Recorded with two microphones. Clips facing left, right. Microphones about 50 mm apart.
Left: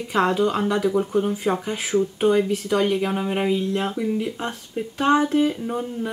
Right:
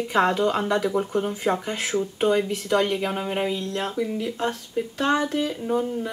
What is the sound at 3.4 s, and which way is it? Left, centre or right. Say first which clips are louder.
Speech: left 4 dB; centre.